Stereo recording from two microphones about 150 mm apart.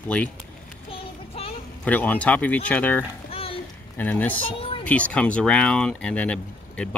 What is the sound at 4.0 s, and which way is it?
Speech, 10° left (ahead or behind).